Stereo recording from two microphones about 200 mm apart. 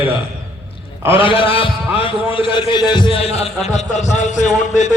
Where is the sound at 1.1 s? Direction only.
25° left (ahead or behind).